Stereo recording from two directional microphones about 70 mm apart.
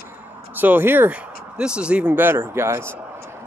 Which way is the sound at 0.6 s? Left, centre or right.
Right.